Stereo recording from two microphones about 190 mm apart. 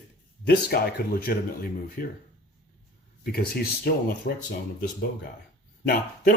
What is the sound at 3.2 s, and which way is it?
Speech, 50° left (ahead or behind).